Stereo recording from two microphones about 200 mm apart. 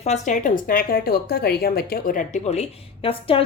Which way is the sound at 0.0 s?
35° left (ahead or behind).